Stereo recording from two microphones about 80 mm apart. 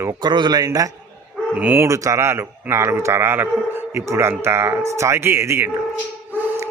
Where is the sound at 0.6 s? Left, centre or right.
Right.